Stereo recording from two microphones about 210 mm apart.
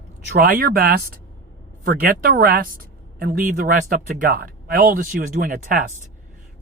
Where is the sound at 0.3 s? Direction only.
45° right (ahead or behind).